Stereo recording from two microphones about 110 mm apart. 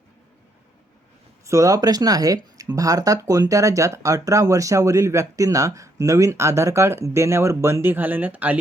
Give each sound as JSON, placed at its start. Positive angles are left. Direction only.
{"t": 1.5, "sound": "speech", "side_deg": -30}